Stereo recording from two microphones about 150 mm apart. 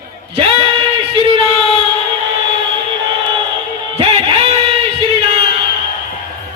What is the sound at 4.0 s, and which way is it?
Music, 40° right (ahead or behind).